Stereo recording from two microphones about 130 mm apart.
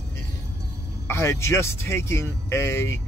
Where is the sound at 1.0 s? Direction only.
20° left (ahead or behind).